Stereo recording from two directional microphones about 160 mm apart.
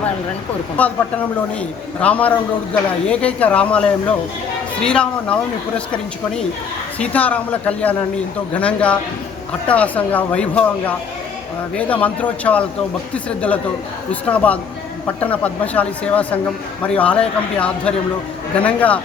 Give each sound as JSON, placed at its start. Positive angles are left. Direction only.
{"t": 0.8, "sound": "a woman's voice", "side_deg": 10}
{"t": 7.0, "sound": "a woman's voice", "side_deg": 10}
{"t": 14.1, "sound": "a woman's voice", "side_deg": 10}